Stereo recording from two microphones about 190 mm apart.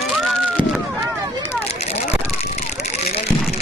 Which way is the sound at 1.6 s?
35° left (ahead or behind).